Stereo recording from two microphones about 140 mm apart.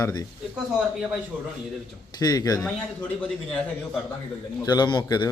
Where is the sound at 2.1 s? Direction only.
25° left (ahead or behind).